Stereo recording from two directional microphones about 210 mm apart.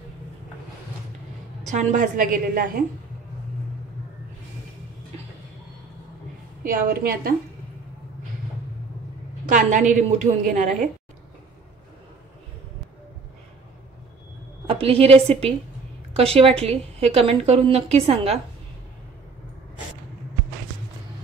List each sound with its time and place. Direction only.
1.7 s a woman's voice: 35° right (ahead or behind)
6.6 s a woman's voice: 45° right (ahead or behind)
9.5 s a woman's voice: 40° right (ahead or behind)
14.7 s a woman's voice: 25° right (ahead or behind)